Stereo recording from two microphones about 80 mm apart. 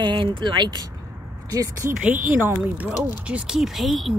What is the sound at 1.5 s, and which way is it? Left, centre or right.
Speech, right.